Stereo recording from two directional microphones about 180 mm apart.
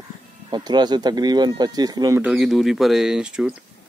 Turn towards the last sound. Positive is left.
turn(degrees=-5)  # may be behind; listen again after turning